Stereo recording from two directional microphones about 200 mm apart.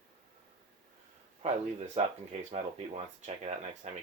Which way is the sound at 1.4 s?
35° right (ahead or behind).